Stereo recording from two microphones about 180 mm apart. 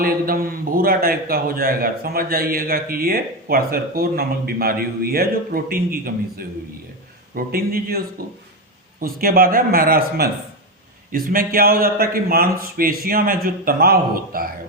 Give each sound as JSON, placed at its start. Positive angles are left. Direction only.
{"t": 0.0, "sound": "a man's voice", "side_deg": -55}